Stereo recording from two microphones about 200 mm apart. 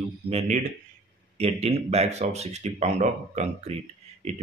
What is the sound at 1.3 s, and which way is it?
Speech, 30° right (ahead or behind).